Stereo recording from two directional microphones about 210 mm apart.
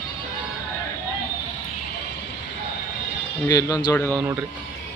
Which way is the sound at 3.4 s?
20° left (ahead or behind).